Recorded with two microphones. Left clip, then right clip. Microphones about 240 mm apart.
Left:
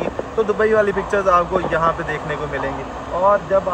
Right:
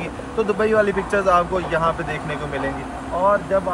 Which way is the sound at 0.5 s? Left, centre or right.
Centre.